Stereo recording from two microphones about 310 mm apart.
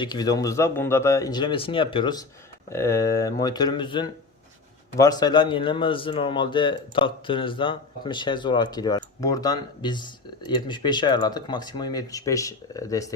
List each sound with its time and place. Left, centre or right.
0.0 s a man's voice: centre